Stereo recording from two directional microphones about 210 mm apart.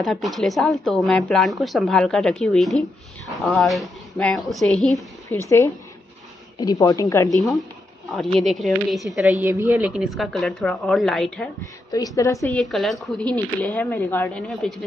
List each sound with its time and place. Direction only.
0.0 s a woman's voice: centre (ahead or behind)
6.6 s a woman's voice: 15° left (ahead or behind)
8.1 s speech: centre (ahead or behind)
11.9 s a woman's voice: 15° left (ahead or behind)
12.5 s speech: centre (ahead or behind)